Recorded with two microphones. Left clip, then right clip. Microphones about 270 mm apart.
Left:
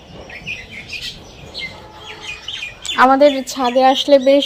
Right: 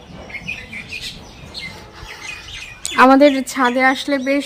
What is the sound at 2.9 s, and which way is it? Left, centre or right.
Speech, centre.